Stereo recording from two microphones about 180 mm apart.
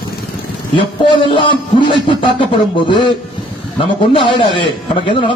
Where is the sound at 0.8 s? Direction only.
30° left (ahead or behind).